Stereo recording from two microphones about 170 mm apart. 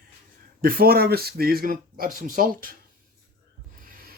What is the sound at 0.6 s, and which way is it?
Speech, 60° right (ahead or behind).